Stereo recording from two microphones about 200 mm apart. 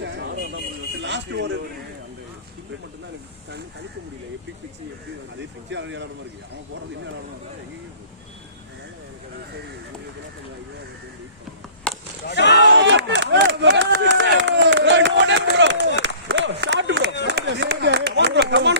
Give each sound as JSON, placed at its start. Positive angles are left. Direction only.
{"t": 0.0, "sound": "vehicle", "side_deg": -60}
{"t": 1.0, "sound": "speech", "side_deg": -60}
{"t": 5.7, "sound": "speech", "side_deg": -65}
{"t": 12.2, "sound": "speech", "side_deg": 60}
{"t": 12.6, "sound": "a sound", "side_deg": -65}
{"t": 17.2, "sound": "speech", "side_deg": -60}